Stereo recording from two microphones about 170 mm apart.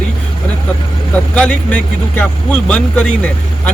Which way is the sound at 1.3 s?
5° left (ahead or behind).